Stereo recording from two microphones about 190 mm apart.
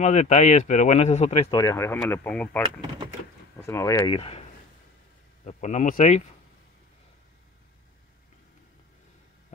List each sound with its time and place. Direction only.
0.0 s speech: 35° left (ahead or behind)
1.5 s speech: 20° left (ahead or behind)
3.6 s speech: 15° left (ahead or behind); by 6.2 s 40° left (ahead or behind)